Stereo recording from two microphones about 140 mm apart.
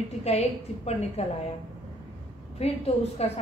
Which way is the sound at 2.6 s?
45° left (ahead or behind).